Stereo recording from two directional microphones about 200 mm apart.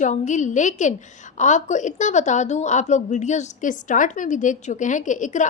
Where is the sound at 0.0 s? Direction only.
35° left (ahead or behind).